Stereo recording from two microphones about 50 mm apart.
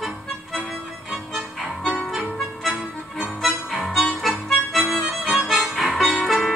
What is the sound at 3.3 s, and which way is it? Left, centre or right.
Harmonica, centre.